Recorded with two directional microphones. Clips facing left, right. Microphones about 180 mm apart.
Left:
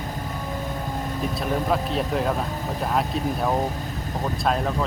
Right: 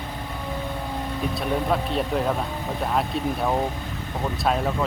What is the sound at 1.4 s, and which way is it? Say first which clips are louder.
Speech: even; centre (ahead or behind).